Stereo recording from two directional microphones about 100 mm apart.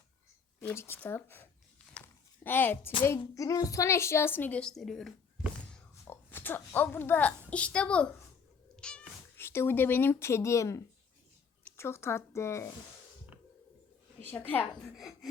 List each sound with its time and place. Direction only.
0.7 s a woman's voice: 20° left (ahead or behind)
1.9 s a sound: 15° left (ahead or behind)
3.3 s a woman's voice: 35° left (ahead or behind); by 5.1 s 5° left (ahead or behind)
6.1 s a woman's voice: 20° left (ahead or behind)
8.7 s cat: 10° left (ahead or behind)
9.3 s a woman's voice: 25° left (ahead or behind)
14.2 s a woman's voice: 20° left (ahead or behind)
14.9 s speech: 5° right (ahead or behind)